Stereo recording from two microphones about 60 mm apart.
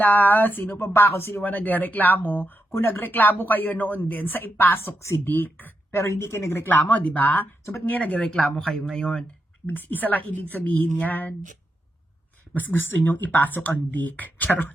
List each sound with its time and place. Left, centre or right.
0.0 s speech: left
5.9 s a woman's voice: left
6.7 s speech: left
8.2 s speech: centre
9.6 s speech: left
12.5 s speech: left